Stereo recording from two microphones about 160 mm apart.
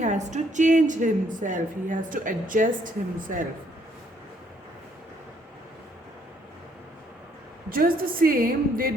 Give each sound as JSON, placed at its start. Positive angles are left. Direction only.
{"t": 0.0, "sound": "a woman's voice", "side_deg": -50}
{"t": 7.7, "sound": "a woman's voice", "side_deg": -65}